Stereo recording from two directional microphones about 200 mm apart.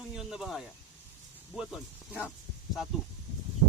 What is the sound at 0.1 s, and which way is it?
Speech, centre (ahead or behind).